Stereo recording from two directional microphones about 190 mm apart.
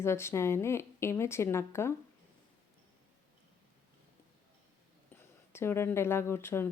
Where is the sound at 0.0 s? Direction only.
15° left (ahead or behind).